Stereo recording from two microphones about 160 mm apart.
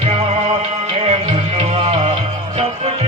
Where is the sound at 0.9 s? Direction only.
45° right (ahead or behind).